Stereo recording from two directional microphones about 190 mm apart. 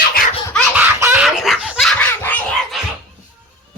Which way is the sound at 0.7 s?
10° right (ahead or behind).